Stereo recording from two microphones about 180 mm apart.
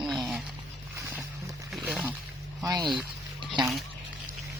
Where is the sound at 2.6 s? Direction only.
20° right (ahead or behind).